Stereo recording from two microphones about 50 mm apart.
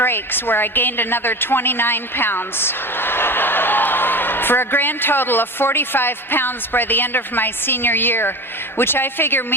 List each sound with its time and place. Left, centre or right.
0.0 s a woman's voice: left